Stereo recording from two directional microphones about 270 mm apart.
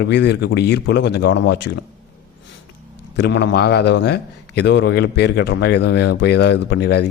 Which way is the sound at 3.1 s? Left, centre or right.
Left.